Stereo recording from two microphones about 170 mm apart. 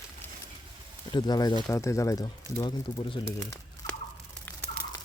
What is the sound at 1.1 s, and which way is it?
Speech, 25° left (ahead or behind).